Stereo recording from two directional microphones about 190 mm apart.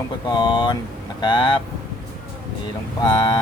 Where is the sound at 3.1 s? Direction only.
25° left (ahead or behind).